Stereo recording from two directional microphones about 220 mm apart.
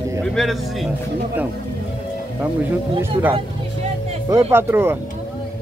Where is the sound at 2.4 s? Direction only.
10° right (ahead or behind).